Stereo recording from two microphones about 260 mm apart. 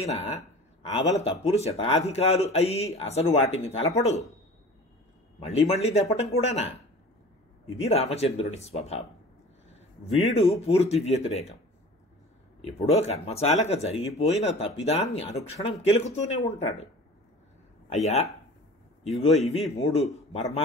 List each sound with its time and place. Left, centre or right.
0.0 s speech: left
5.5 s speech: left
7.8 s speech: left
10.3 s speech: left
12.6 s speech: left
17.9 s speech: left
19.2 s speech: left